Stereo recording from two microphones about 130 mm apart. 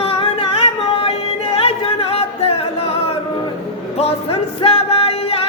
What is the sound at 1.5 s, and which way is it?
Music, 50° left (ahead or behind).